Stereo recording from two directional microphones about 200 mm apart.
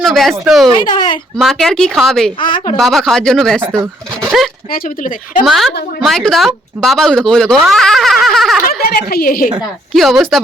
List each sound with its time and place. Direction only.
0.0 s a woman's voice: centre (ahead or behind)
0.9 s a woman's voice: 20° left (ahead or behind)
1.4 s a woman's voice: centre (ahead or behind)
2.4 s a woman's voice: 25° left (ahead or behind)
2.7 s a woman's voice: centre (ahead or behind)
3.7 s speech: 15° right (ahead or behind)
4.7 s speech: 45° left (ahead or behind)
5.5 s a woman's voice: centre (ahead or behind)
7.7 s a sound: centre (ahead or behind)
8.8 s speech: 50° left (ahead or behind)
9.9 s a woman's voice: centre (ahead or behind)